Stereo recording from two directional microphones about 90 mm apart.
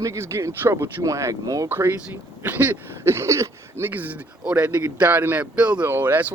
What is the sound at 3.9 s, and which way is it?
Speech, 20° right (ahead or behind).